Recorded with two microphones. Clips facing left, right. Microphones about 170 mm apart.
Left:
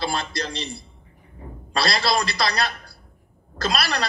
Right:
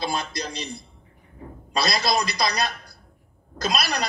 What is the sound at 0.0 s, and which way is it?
A man's voice, 15° right (ahead or behind).